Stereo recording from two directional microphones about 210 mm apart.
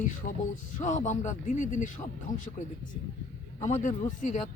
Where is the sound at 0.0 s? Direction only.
40° left (ahead or behind).